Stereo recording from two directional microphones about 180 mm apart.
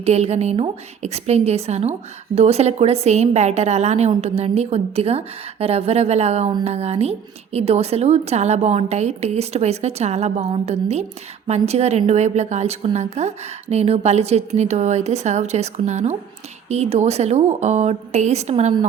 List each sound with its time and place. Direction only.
0.0 s a woman's voice: 35° right (ahead or behind)